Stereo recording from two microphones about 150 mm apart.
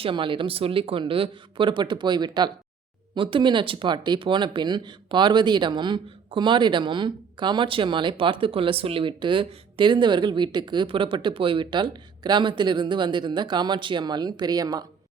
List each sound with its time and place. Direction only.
0.0 s speech: 35° right (ahead or behind)